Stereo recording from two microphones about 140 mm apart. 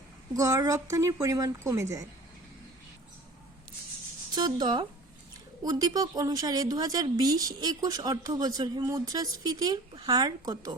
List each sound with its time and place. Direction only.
0.3 s speech: 25° right (ahead or behind)
4.4 s speech: 30° right (ahead or behind)